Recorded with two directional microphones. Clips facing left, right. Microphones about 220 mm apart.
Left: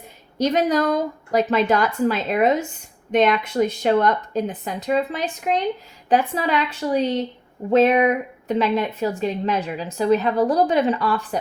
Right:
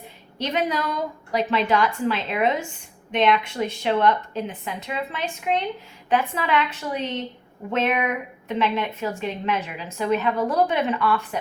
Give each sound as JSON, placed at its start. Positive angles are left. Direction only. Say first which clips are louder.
{"t": 0.3, "sound": "a woman's voice", "louder": "left 6 dB", "side_deg": 40}